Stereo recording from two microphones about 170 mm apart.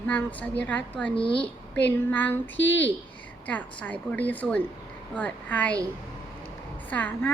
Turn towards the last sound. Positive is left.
turn(degrees=10)  # may be behind; listen again after turning